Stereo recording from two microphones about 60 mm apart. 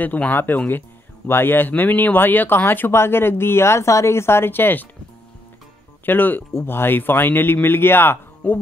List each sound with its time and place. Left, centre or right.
0.0 s speech: left
6.0 s speech: left